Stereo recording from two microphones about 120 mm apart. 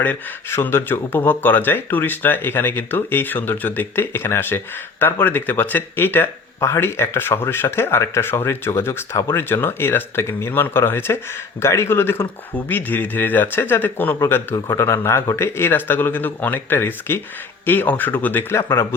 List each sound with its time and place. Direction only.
0.0 s speech: 15° left (ahead or behind)